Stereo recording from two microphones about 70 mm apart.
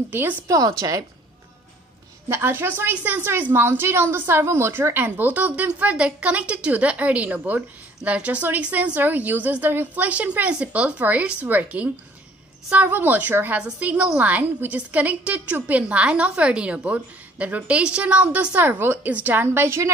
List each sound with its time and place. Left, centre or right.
0.1 s a woman's voice: right
0.5 s speech: right
2.2 s a woman's voice: right